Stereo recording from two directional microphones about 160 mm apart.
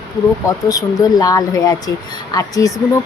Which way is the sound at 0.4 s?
20° left (ahead or behind).